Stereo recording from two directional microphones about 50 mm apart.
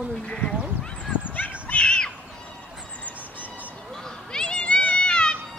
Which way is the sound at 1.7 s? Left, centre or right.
Left.